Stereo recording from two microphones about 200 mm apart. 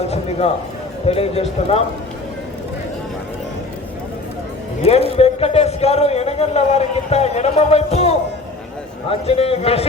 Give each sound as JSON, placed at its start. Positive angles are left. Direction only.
{"t": 0.0, "sound": "speech", "side_deg": 30}
{"t": 4.8, "sound": "speech", "side_deg": 30}